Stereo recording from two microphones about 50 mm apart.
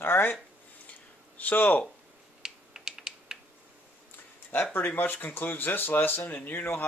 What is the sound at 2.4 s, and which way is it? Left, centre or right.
Typing, centre.